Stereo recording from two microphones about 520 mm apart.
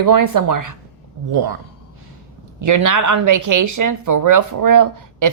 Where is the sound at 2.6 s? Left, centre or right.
Right.